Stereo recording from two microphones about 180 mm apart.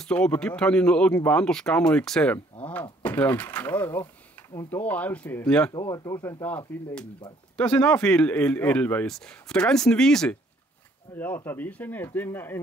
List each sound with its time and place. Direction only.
0.0 s speech: 5° left (ahead or behind)
5.7 s speech: 15° left (ahead or behind)